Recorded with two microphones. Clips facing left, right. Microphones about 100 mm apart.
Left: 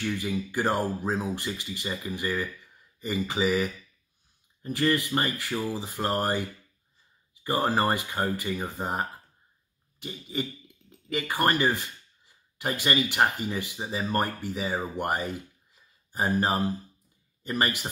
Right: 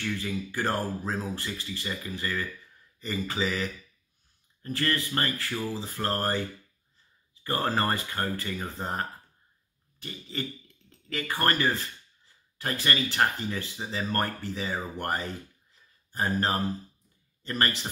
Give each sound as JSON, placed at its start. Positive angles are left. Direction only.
{"t": 0.0, "sound": "speech", "side_deg": 15}
{"t": 7.4, "sound": "speech", "side_deg": 15}